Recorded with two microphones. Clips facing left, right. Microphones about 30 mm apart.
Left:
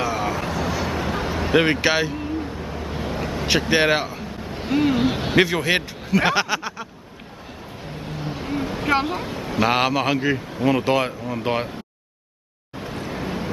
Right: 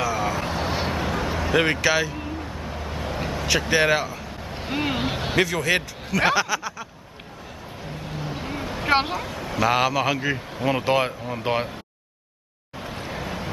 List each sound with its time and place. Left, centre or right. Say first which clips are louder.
0.0 s vehicle: left 1 dB; centre
0.6 s vehicle: left 1 dB; right
0.9 s a sound: left 1 dB; centre
1.5 s speech: left 2 dB; centre
2.1 s a sound: left 4 dB; centre
3.4 s speech: left 2 dB; centre
4.5 s a sound: left 4 dB; centre
4.7 s speech: left 6 dB; centre
5.4 s speech: left 2 dB; left
8.1 s vehicle: left 4 dB; centre
9.2 s a sound: left 2 dB; centre
9.6 s a man's voice: left 1 dB; centre
12.8 s vehicle: left 3 dB; centre